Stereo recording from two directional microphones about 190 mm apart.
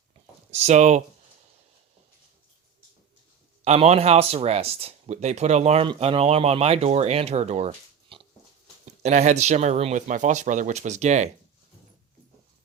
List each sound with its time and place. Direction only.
0.5 s speech: 35° right (ahead or behind)
3.6 s speech: 35° right (ahead or behind)